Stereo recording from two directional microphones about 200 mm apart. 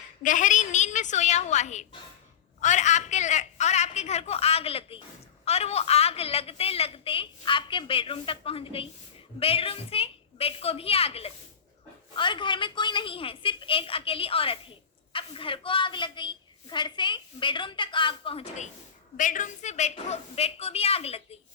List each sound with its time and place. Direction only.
0.2 s a woman's voice: 40° left (ahead or behind)